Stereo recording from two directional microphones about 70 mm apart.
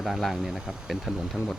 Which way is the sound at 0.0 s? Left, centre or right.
Centre.